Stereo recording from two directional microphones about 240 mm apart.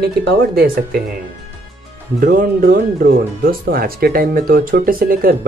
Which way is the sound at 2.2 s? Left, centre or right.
Right.